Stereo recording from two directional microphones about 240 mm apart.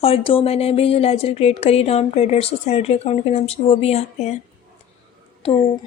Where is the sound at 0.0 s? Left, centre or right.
Left.